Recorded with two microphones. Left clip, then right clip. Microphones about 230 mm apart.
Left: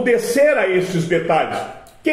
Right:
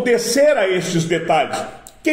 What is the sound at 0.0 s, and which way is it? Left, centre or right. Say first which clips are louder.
A man's voice: even; right.